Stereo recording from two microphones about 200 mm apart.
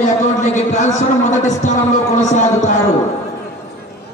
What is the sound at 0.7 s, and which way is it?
A man's voice, 35° left (ahead or behind).